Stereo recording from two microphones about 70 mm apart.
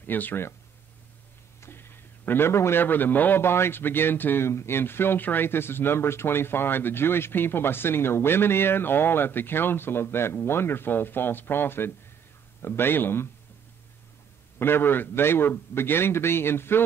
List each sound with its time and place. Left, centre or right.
0.0 s speech: left
1.6 s a sound: left
2.8 s a man's voice: left
14.6 s a man's voice: left